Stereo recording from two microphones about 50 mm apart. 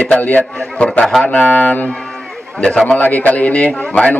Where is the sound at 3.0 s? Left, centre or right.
Left.